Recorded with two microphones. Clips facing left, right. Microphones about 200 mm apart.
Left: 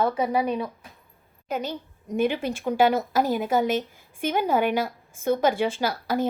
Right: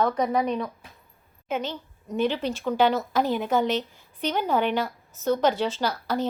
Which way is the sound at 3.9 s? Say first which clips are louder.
Left 1 dB; 50° left (ahead or behind).